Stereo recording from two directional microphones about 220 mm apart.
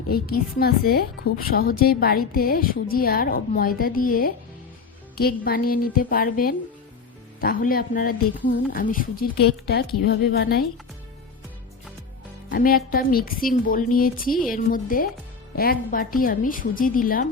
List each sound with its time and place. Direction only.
0.1 s a woman's voice: 45° left (ahead or behind)
12.5 s a woman's voice: 40° left (ahead or behind)